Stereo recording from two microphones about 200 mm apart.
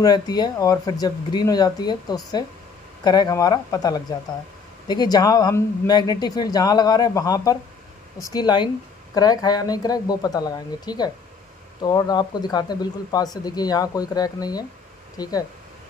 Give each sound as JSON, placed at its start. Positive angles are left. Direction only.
{"t": 0.0, "sound": "speech", "side_deg": 20}